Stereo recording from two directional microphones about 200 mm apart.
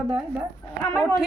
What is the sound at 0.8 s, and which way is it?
Speech, 15° left (ahead or behind).